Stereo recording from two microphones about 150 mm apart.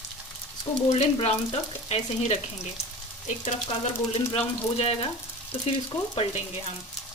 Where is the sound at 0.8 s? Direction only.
45° left (ahead or behind).